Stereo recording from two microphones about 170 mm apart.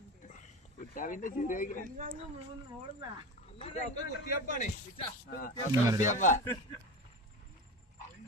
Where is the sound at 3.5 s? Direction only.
40° left (ahead or behind).